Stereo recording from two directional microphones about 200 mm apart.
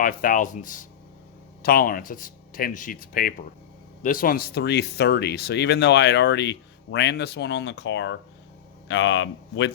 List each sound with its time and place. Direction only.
0.0 s speech: 40° left (ahead or behind); by 9.7 s 65° left (ahead or behind)